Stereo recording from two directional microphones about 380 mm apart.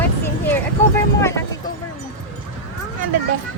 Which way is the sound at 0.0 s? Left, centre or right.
Centre.